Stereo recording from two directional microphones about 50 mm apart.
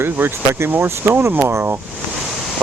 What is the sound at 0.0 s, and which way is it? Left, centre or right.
Speech, right.